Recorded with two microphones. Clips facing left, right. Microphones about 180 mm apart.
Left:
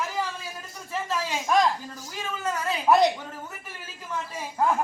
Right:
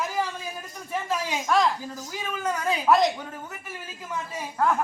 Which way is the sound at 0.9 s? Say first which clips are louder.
Right 1 dB; 15° right (ahead or behind).